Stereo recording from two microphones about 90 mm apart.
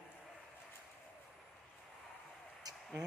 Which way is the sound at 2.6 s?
45° right (ahead or behind).